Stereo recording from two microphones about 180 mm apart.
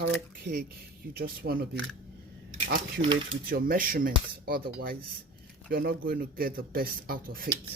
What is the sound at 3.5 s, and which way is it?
Speech, 50° right (ahead or behind).